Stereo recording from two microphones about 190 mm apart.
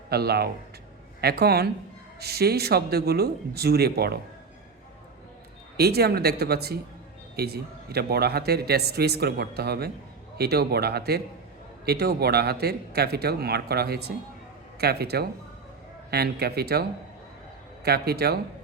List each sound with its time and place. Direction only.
0.1 s a man's voice: 55° right (ahead or behind)
5.7 s a man's voice: 55° right (ahead or behind)
17.8 s a man's voice: 55° right (ahead or behind)